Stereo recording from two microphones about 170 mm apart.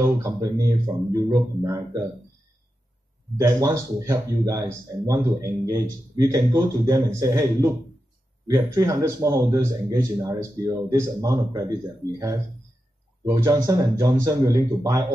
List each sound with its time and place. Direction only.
0.0 s speech: 20° right (ahead or behind)
3.3 s speech: 20° right (ahead or behind)
13.2 s speech: 20° right (ahead or behind)